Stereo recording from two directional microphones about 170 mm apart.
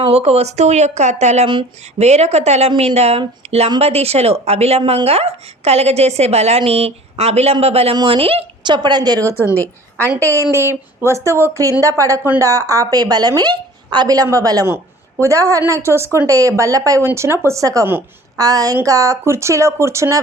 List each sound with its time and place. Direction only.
0.1 s a woman's voice: 35° right (ahead or behind)
9.4 s a woman's voice: 10° left (ahead or behind)
10.5 s a woman's voice: 15° right (ahead or behind)